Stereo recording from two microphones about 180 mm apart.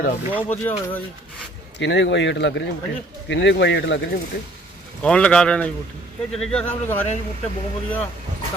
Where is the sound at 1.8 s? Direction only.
90° left.